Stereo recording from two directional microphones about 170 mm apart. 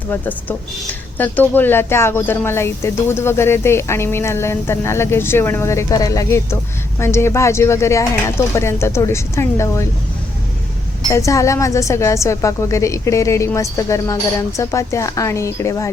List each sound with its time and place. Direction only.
0.1 s speech: 10° left (ahead or behind)
11.1 s speech: 20° left (ahead or behind)